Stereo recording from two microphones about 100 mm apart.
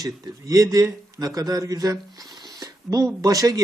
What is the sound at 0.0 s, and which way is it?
Speech, 35° right (ahead or behind).